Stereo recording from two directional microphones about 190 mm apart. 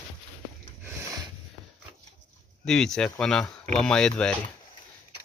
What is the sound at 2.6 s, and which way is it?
Speech, centre (ahead or behind).